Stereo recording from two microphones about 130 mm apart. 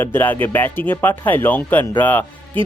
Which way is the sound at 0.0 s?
15° left (ahead or behind).